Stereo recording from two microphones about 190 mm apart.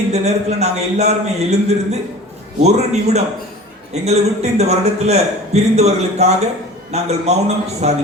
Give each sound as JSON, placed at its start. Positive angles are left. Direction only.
{"t": 0.1, "sound": "a man's voice", "side_deg": -35}